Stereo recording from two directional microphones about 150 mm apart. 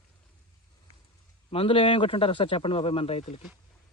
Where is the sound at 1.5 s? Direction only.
35° left (ahead or behind).